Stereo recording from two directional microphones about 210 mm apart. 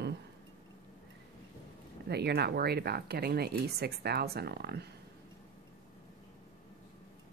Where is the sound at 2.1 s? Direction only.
50° right (ahead or behind).